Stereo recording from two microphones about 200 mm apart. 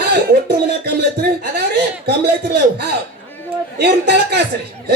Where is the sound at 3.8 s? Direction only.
55° right (ahead or behind).